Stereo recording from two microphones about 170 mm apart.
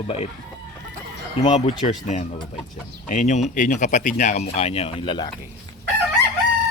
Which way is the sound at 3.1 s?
45° left (ahead or behind).